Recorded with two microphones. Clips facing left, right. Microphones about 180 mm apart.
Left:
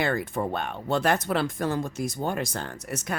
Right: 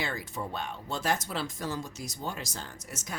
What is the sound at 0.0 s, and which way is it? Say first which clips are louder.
Speech: left 9 dB; 55° left (ahead or behind).